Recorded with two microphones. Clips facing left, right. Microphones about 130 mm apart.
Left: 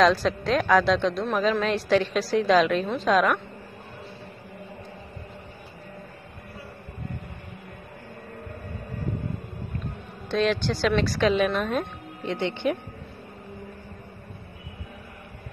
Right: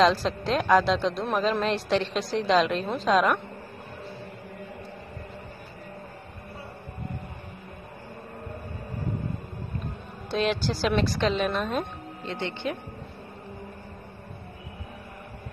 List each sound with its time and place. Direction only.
0.0 s a woman's voice: centre (ahead or behind)
10.5 s a woman's voice: centre (ahead or behind)
12.2 s speech: 15° left (ahead or behind)